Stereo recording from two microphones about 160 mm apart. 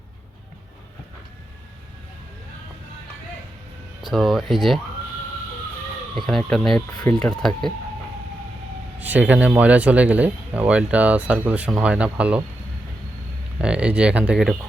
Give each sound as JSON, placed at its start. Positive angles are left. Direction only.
{"t": 4.1, "sound": "speech", "side_deg": 0}
{"t": 6.1, "sound": "speech", "side_deg": 0}
{"t": 6.9, "sound": "speech", "side_deg": 25}
{"t": 7.2, "sound": "speech", "side_deg": 5}
{"t": 9.0, "sound": "speech", "side_deg": -10}
{"t": 13.6, "sound": "speech", "side_deg": -5}